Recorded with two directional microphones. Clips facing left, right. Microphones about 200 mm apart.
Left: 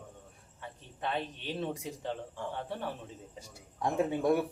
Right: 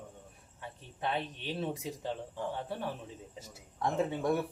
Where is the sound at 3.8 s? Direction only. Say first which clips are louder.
Left 2 dB; 15° left (ahead or behind).